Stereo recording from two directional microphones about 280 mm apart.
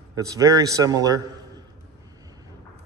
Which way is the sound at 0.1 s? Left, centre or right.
Centre.